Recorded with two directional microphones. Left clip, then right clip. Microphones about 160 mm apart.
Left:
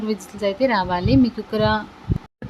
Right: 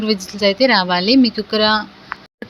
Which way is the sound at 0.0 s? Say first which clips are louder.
Right 7 dB; 15° right (ahead or behind).